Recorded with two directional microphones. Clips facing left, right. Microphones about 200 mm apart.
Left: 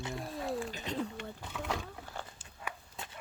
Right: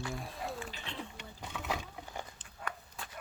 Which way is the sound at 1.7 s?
15° right (ahead or behind).